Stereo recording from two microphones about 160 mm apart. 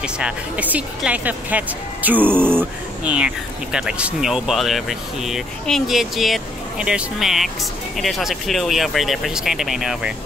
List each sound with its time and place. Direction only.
0.0 s speech: 10° right (ahead or behind)